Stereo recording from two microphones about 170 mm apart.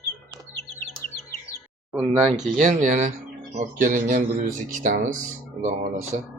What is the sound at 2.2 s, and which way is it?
A man's voice, 45° right (ahead or behind).